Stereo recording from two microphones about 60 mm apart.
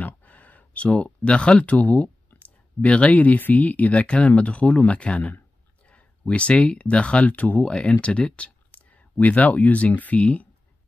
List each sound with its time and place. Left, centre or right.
0.0 s speech: left
8.0 s a sound: centre
9.2 s speech: left